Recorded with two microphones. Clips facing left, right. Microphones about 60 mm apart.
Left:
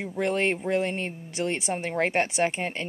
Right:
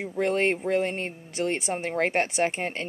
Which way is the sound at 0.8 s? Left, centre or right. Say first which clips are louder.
Even; centre.